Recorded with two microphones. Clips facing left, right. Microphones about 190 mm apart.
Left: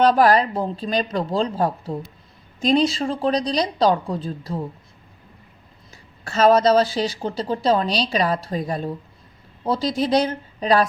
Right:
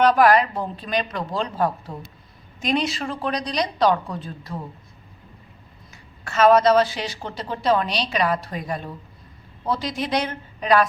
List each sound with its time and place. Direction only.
0.0 s a woman's voice: 30° left (ahead or behind)
6.2 s a woman's voice: 35° left (ahead or behind)